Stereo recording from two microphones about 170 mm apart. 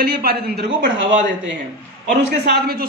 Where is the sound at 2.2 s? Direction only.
70° right (ahead or behind).